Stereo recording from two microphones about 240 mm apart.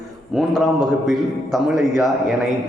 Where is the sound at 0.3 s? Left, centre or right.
Centre.